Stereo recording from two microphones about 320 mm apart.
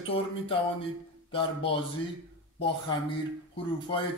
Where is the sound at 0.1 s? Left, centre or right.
Centre.